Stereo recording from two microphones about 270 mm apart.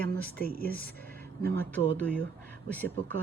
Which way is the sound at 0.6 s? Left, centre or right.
Centre.